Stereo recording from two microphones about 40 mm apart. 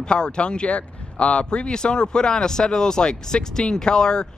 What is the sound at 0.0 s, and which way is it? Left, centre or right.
Speech, left.